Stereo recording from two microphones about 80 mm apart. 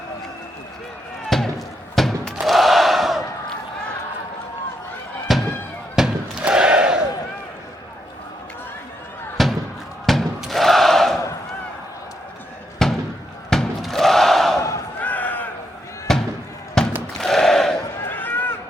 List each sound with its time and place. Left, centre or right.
1.3 s battle cry: centre
5.3 s fireworks: centre
6.0 s a sound: centre
6.5 s battle cry: centre
9.4 s slam: centre
10.1 s a sound: centre
12.8 s slam: centre
13.5 s battle cry: centre
15.0 s a sound: centre
16.1 s music: centre
16.8 s a sound: centre
18.0 s run: left